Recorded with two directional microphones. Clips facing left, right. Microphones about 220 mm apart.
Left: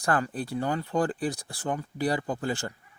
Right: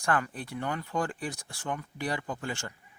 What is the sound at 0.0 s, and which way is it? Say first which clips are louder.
Speech: left 3 dB; 35° left (ahead or behind).